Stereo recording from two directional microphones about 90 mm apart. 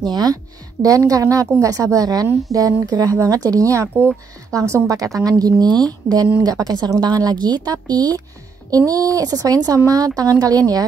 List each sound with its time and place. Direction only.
0.0 s speech: 50° right (ahead or behind)